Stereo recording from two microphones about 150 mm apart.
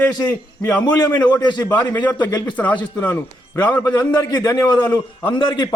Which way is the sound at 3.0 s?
15° left (ahead or behind).